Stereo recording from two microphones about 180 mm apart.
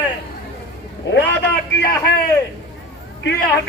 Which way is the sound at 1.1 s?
70° left (ahead or behind).